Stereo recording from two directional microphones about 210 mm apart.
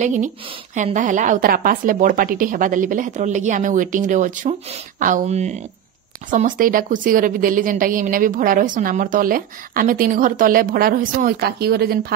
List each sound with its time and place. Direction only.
0.0 s a woman's voice: 35° right (ahead or behind)